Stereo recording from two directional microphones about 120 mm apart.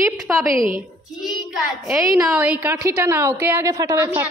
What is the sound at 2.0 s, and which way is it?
Speech, 30° right (ahead or behind).